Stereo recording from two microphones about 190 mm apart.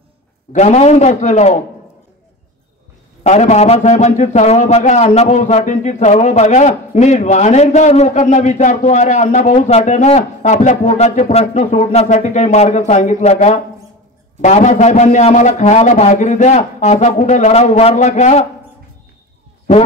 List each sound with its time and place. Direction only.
0.5 s a man's voice: 40° left (ahead or behind)
3.3 s a man's voice: 35° left (ahead or behind)